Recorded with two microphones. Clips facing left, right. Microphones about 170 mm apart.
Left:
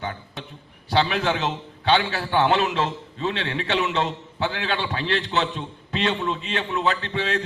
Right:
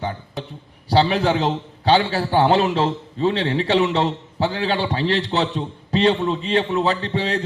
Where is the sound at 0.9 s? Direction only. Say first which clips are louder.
Right 5 dB; 35° right (ahead or behind).